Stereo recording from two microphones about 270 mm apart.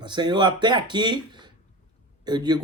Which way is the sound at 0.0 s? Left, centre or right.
Centre.